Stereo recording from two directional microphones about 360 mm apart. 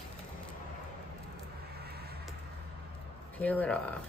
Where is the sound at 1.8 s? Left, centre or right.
Right.